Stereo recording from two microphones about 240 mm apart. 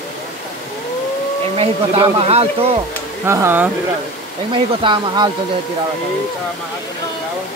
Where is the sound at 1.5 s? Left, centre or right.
Right.